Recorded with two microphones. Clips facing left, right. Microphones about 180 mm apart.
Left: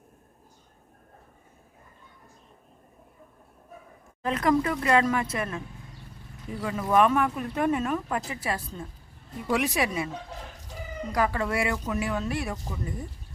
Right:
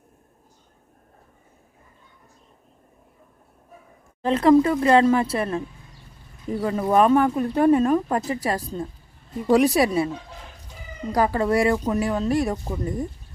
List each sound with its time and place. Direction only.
4.2 s speech: 30° right (ahead or behind)
11.1 s speech: 35° right (ahead or behind)